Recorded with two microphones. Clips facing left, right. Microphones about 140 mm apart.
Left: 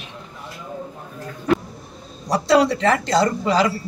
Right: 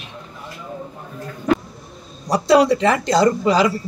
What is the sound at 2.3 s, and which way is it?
Speech, 20° right (ahead or behind).